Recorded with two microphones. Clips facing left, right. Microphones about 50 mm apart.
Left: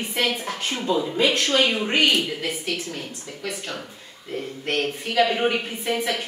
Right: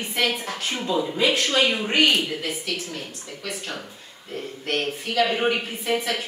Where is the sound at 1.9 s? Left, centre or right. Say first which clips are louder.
Right 1 dB; centre.